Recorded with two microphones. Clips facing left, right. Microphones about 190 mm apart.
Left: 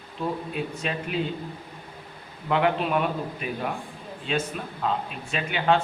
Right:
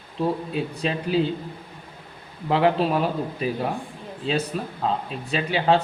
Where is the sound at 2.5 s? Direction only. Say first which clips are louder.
Right 3 dB; 35° right (ahead or behind).